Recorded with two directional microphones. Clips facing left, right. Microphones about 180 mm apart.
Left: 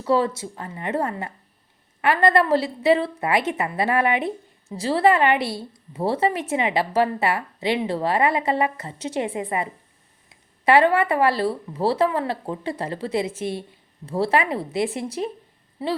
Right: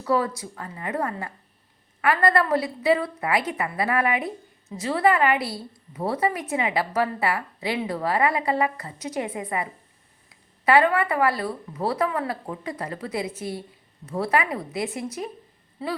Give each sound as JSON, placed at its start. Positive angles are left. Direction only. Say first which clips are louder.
{"t": 0.0, "sound": "a woman's voice", "louder": "left 3 dB", "side_deg": 25}